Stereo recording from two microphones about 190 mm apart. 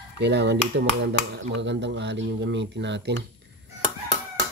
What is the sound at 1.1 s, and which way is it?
Speech, 75° right (ahead or behind).